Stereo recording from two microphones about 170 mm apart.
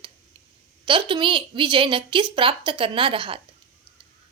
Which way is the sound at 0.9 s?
30° right (ahead or behind).